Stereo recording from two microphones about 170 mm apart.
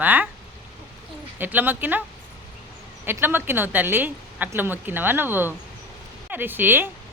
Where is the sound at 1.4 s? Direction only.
10° right (ahead or behind).